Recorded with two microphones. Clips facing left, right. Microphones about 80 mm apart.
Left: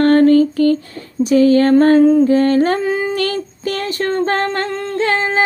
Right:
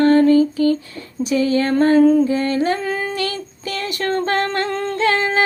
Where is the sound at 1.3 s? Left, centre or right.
Left.